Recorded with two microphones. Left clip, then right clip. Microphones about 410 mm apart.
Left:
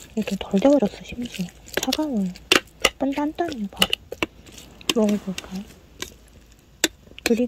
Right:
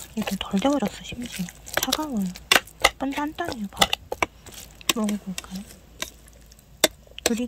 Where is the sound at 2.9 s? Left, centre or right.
Centre.